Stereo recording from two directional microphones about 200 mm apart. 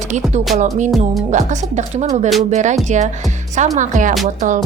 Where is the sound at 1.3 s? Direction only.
35° right (ahead or behind).